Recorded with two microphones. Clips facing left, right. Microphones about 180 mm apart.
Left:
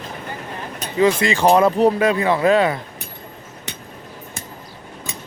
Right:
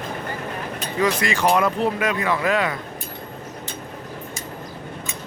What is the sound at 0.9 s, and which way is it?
Speech, 25° left (ahead or behind).